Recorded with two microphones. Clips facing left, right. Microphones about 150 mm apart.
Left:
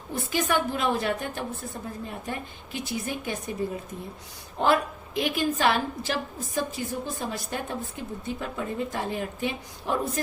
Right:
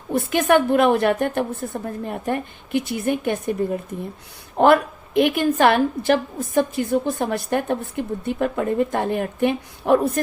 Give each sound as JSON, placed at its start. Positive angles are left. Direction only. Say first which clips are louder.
{"t": 0.1, "sound": "a woman's voice", "louder": "right 9 dB", "side_deg": -60}
{"t": 4.5, "sound": "a woman's voice", "louder": "right 8 dB", "side_deg": -60}